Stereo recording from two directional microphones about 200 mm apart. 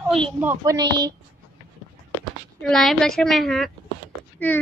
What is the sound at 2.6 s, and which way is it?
A child's voice, 5° left (ahead or behind).